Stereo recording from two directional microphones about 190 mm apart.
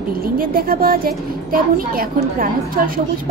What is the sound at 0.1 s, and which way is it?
A child's voice, 50° right (ahead or behind).